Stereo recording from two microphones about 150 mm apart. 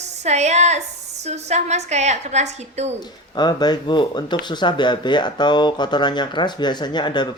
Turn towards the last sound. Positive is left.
turn(degrees=30)  # may be behind; listen again after turning